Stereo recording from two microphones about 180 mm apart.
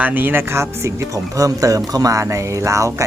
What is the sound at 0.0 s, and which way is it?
Speech, 10° right (ahead or behind).